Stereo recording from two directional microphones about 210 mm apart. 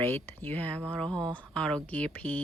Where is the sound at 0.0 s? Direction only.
10° left (ahead or behind).